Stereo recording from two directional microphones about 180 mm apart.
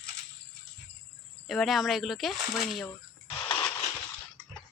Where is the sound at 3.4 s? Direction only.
20° left (ahead or behind).